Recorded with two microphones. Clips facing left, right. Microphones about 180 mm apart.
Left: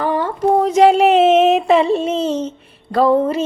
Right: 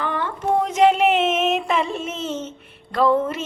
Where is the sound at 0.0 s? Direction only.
40° left (ahead or behind).